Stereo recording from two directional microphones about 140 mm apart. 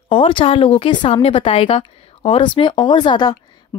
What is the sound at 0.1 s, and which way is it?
Speech, 40° left (ahead or behind).